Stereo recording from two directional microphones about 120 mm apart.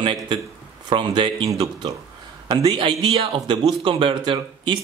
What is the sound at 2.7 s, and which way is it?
Speech, 50° right (ahead or behind).